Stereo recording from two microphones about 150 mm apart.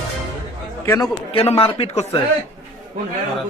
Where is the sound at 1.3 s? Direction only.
40° left (ahead or behind).